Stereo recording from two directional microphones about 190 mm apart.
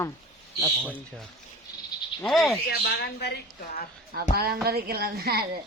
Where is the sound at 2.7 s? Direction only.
55° left (ahead or behind).